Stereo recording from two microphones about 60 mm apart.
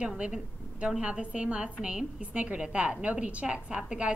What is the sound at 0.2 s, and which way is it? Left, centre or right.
A woman's voice, centre.